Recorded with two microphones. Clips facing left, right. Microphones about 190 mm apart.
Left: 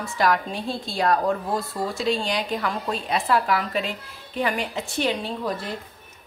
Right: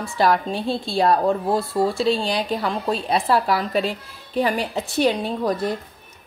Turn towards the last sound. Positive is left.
turn(degrees=-40)  # may be behind; listen again after turning